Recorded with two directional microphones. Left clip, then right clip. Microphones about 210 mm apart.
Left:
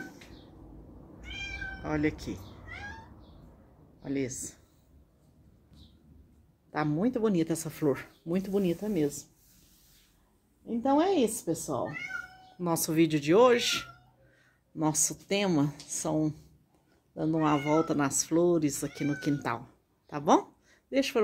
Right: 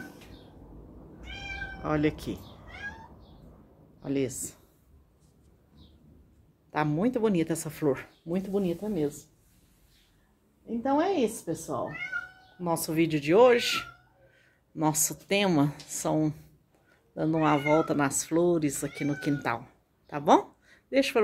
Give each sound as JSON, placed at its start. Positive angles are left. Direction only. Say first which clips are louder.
{"t": 1.8, "sound": "speech", "louder": "right 3 dB", "side_deg": -15}
{"t": 4.0, "sound": "speech", "louder": "right 3 dB", "side_deg": -10}
{"t": 6.7, "sound": "speech", "louder": "right 2 dB", "side_deg": 5}
{"t": 10.8, "sound": "speech", "louder": "even", "side_deg": 25}
{"t": 20.1, "sound": "a sound", "louder": "right 3 dB", "side_deg": 5}